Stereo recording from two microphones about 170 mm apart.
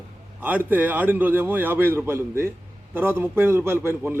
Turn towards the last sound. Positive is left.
turn(degrees=-15)  # may be behind; listen again after turning